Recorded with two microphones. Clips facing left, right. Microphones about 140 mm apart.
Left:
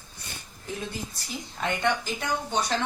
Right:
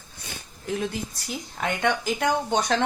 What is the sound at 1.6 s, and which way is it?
Speech, 70° right (ahead or behind).